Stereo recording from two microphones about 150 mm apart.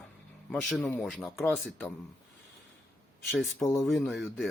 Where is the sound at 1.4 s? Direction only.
10° left (ahead or behind).